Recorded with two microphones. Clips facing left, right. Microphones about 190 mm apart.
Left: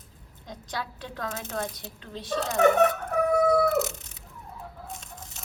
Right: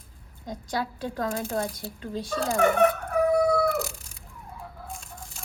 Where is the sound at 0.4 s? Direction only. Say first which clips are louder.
Right 5 dB; 45° right (ahead or behind).